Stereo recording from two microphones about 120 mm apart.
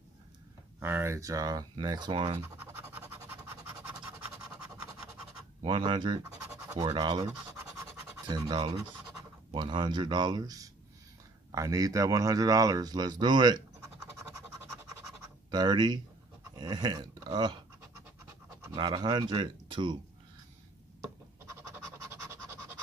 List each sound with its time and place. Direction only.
0.7 s speech: 20° right (ahead or behind); by 2.4 s 45° right (ahead or behind)
2.4 s scratch: 15° right (ahead or behind)
5.6 s speech: 45° right (ahead or behind)
8.3 s speech: 35° right (ahead or behind)
14.0 s scratch: 20° right (ahead or behind)
15.5 s speech: 35° right (ahead or behind)
18.8 s speech: 40° right (ahead or behind)
21.0 s a sound: 25° right (ahead or behind)